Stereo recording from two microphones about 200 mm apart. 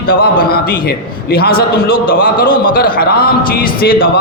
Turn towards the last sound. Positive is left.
turn(degrees=45)  # may be behind; listen again after turning